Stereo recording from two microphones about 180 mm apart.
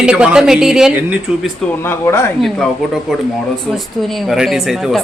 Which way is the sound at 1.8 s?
15° left (ahead or behind).